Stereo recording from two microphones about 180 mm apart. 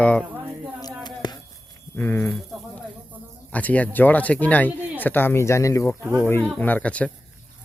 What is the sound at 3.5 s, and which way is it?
Speech, 10° left (ahead or behind).